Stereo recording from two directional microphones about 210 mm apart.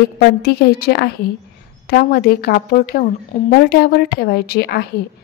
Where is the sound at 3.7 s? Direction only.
45° left (ahead or behind).